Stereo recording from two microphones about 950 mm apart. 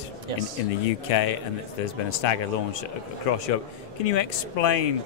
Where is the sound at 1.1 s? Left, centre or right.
Left.